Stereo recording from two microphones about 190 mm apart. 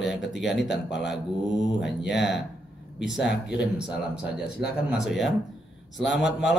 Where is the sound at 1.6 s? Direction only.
70° left (ahead or behind).